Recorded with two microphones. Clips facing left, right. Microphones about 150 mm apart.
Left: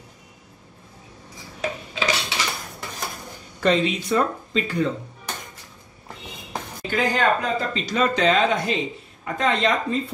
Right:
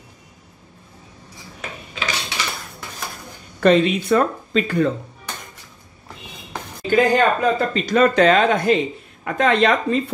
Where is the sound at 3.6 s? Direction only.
55° right (ahead or behind).